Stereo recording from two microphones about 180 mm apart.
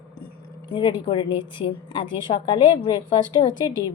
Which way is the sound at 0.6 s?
25° left (ahead or behind).